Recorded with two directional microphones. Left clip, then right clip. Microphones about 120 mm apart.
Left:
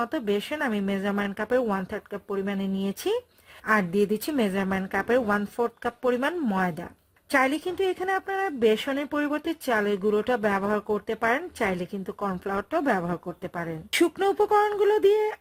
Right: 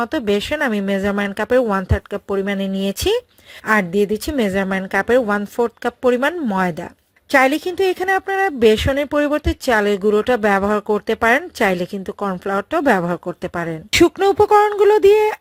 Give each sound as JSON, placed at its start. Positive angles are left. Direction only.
{"t": 0.0, "sound": "speech", "side_deg": -40}
{"t": 3.9, "sound": "speech", "side_deg": -25}